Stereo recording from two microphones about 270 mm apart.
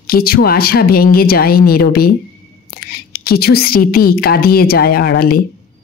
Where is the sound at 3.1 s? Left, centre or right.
Left.